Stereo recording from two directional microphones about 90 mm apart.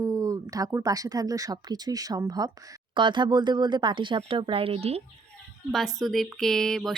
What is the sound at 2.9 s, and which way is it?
Speech, 60° right (ahead or behind).